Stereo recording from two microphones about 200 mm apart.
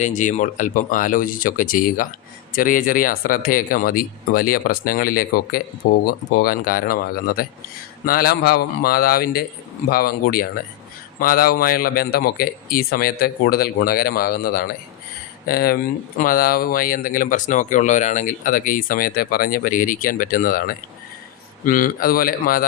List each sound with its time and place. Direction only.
0.0 s speech: 40° left (ahead or behind)